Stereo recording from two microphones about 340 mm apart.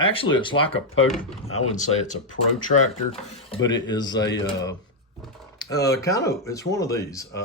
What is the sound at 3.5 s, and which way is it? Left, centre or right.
Speech, centre.